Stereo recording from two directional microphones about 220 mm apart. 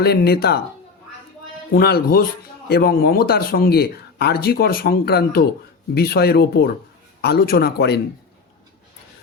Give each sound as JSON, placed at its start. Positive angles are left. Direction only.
{"t": 0.0, "sound": "a man's voice", "side_deg": 45}
{"t": 1.7, "sound": "a man's voice", "side_deg": 45}